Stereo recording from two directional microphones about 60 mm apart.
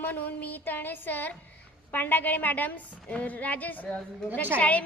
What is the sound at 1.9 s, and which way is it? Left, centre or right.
A child's voice, left.